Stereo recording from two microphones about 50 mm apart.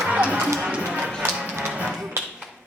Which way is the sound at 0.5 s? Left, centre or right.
Centre.